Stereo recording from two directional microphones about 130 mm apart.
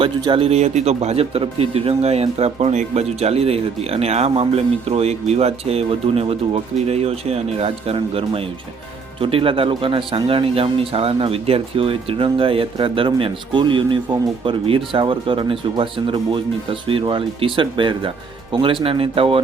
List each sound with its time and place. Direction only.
0.0 s speech: 45° right (ahead or behind)